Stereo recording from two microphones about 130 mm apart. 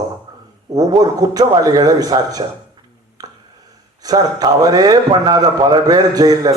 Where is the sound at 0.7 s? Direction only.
30° right (ahead or behind).